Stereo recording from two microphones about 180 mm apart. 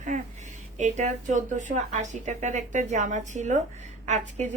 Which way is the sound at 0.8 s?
40° right (ahead or behind).